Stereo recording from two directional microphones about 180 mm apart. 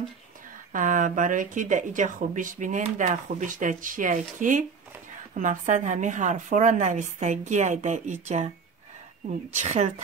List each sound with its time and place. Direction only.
0.7 s speech: 45° right (ahead or behind)
9.6 s a woman's voice: 40° right (ahead or behind)